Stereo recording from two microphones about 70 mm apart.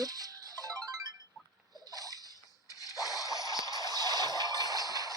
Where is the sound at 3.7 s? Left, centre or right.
Right.